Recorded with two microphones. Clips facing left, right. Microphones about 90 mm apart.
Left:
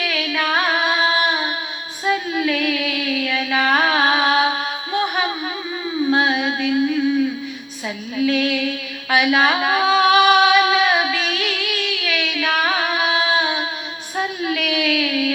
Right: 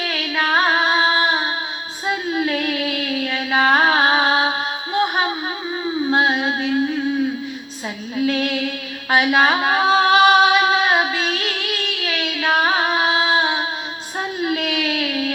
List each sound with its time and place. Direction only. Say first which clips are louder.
0.0 s music: even; 35° right (ahead or behind)
2.0 s female singing: left 1 dB; 35° right (ahead or behind)
5.8 s humming: even; 35° right (ahead or behind)
8.1 s a sound: left 1 dB; 35° right (ahead or behind)
14.2 s female singing: even; 30° right (ahead or behind)